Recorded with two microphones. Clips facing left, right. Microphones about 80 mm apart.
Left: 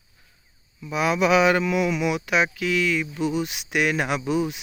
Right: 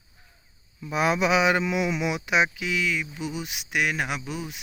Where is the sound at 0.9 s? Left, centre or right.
Right.